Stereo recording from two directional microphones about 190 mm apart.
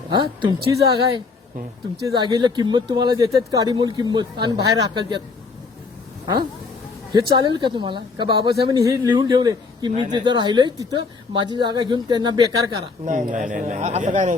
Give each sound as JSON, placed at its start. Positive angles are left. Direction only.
{"t": 0.1, "sound": "speech", "side_deg": -25}
{"t": 7.1, "sound": "speech", "side_deg": -25}
{"t": 13.1, "sound": "a man's voice", "side_deg": -40}